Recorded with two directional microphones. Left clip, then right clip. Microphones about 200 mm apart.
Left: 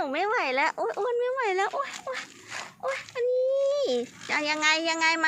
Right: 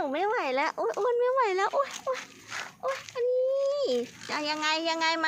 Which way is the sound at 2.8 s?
Centre (ahead or behind).